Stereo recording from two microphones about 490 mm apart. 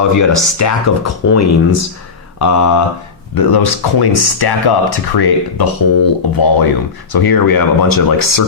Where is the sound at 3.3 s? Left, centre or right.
Left.